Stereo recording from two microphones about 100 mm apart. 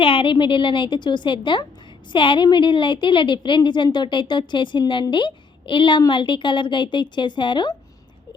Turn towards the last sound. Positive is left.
turn(degrees=50)  # may be behind; listen again after turning